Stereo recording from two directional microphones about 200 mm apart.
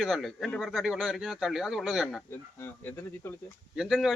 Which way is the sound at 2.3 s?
10° left (ahead or behind).